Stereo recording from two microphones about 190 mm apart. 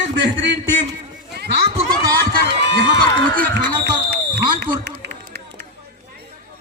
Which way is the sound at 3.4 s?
60° right (ahead or behind).